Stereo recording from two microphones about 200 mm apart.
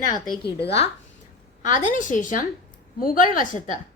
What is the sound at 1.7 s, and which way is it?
A woman's voice, 40° left (ahead or behind).